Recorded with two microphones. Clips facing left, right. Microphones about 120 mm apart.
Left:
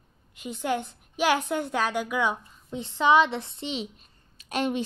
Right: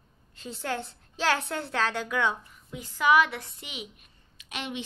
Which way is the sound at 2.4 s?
25° left (ahead or behind).